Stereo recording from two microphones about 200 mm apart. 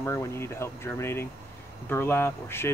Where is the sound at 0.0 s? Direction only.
15° left (ahead or behind).